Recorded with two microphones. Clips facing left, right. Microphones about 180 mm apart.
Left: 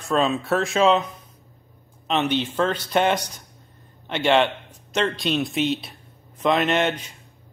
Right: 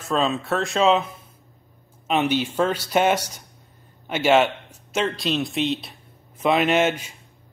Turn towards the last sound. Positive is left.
turn(degrees=-5)  # may be behind; listen again after turning